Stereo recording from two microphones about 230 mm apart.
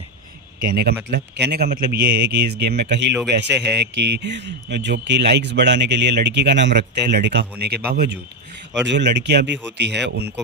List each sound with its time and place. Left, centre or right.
0.6 s speech: right